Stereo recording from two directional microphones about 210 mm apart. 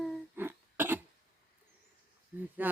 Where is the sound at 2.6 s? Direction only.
10° right (ahead or behind).